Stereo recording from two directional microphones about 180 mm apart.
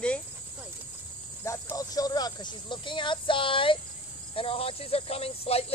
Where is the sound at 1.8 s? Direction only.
20° left (ahead or behind).